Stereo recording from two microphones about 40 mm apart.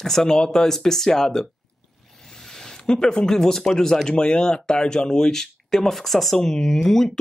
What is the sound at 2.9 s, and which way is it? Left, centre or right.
Speech, left.